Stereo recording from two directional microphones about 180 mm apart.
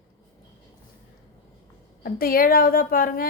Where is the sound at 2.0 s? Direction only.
55° left (ahead or behind).